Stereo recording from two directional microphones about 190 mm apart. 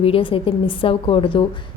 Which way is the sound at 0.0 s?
30° left (ahead or behind).